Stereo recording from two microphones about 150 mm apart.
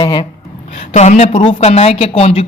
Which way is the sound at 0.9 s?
50° left (ahead or behind).